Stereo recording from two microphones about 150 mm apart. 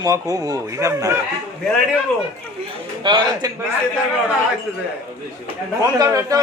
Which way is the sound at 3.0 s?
30° right (ahead or behind).